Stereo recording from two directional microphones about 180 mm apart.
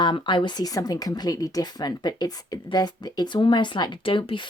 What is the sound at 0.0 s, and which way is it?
Speech, 25° left (ahead or behind).